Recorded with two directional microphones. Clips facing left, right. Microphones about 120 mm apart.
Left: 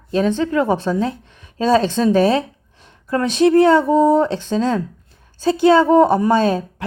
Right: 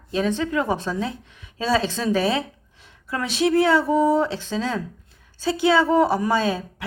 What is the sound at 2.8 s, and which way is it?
Speech, 40° left (ahead or behind).